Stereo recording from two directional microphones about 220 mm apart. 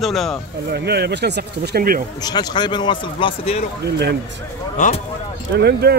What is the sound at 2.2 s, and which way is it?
A man's voice, 20° left (ahead or behind).